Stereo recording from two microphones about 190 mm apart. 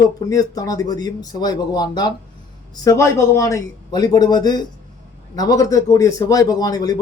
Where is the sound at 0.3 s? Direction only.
20° left (ahead or behind).